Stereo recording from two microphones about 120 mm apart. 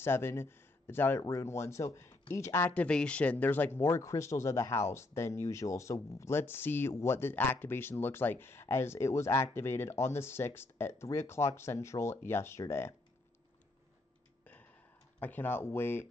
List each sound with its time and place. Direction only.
0.0 s speech: 20° left (ahead or behind)
2.7 s speech: 10° left (ahead or behind)
15.1 s speech: 15° left (ahead or behind)